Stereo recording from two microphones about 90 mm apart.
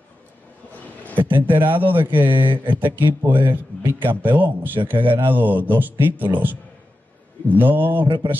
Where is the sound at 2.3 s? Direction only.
70° right (ahead or behind).